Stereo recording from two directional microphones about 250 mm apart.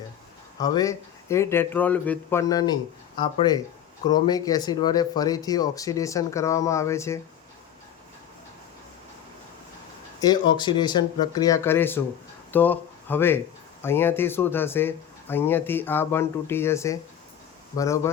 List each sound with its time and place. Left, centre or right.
0.6 s speech: centre
10.2 s speech: centre